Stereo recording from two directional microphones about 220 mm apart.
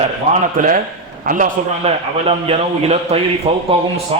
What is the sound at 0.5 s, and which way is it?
A man's voice, 40° right (ahead or behind).